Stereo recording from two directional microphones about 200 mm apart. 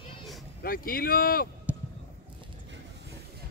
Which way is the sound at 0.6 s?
45° left (ahead or behind).